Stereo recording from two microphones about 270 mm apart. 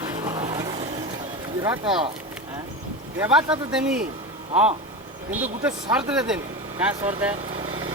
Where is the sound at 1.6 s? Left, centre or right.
Centre.